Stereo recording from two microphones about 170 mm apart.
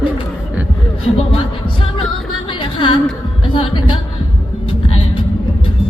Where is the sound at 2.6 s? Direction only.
30° left (ahead or behind).